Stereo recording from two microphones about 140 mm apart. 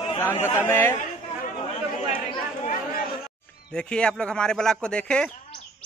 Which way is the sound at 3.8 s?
5° left (ahead or behind).